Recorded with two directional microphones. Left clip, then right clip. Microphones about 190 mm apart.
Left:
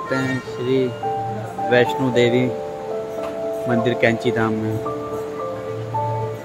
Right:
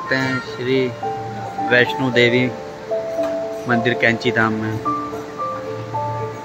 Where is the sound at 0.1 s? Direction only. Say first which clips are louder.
Right 4 dB; 5° left (ahead or behind).